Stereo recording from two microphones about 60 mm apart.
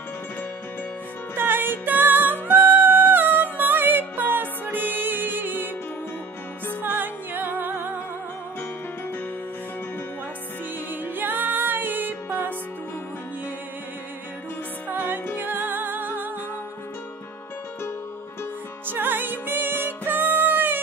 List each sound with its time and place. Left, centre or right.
1.3 s music: right
7.0 s music: right
10.9 s music: right
14.9 s music: right
18.9 s music: right